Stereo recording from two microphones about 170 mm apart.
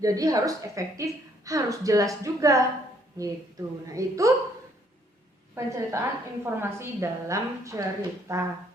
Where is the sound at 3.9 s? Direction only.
20° right (ahead or behind).